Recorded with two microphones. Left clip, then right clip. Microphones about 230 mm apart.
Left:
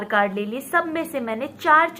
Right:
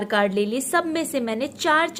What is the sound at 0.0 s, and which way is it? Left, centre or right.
A woman's voice, right.